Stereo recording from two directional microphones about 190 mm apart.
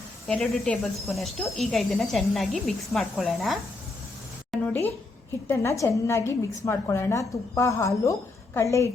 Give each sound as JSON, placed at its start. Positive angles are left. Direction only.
{"t": 0.3, "sound": "speech", "side_deg": 5}
{"t": 4.5, "sound": "a sound", "side_deg": 10}
{"t": 5.5, "sound": "a woman's voice", "side_deg": 15}